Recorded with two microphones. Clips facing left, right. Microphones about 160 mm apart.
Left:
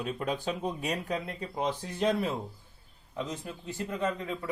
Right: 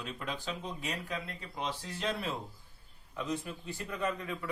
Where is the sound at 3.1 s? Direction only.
25° left (ahead or behind).